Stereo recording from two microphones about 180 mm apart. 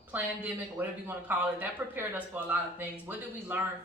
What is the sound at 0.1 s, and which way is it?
A man's voice, 10° right (ahead or behind).